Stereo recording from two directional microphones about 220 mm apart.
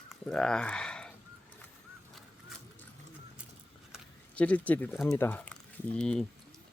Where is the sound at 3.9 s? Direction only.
5° left (ahead or behind).